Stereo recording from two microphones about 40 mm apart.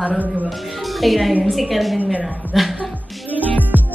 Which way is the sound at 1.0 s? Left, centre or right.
Centre.